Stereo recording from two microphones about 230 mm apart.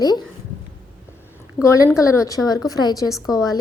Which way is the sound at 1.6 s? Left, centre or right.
Centre.